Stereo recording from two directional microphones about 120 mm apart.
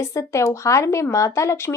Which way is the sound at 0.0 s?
25° left (ahead or behind).